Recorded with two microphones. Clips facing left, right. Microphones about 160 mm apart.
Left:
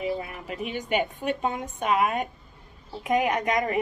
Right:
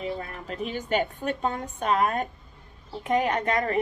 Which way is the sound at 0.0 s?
10° left (ahead or behind).